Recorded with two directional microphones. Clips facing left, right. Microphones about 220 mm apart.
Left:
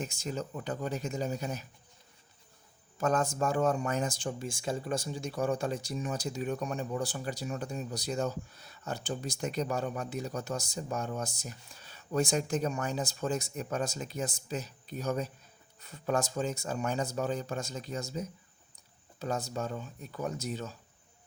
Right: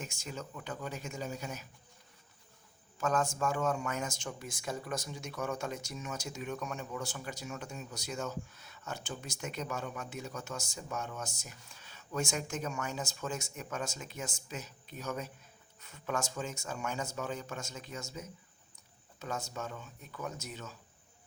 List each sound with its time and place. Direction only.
0.0 s speech: 35° left (ahead or behind)
3.0 s speech: 35° left (ahead or behind)